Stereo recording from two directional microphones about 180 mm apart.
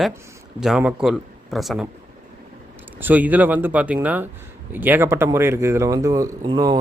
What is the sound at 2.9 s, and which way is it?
Speech, 10° right (ahead or behind).